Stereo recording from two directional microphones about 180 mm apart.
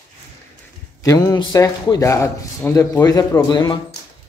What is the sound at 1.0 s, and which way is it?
A man's voice, 20° left (ahead or behind).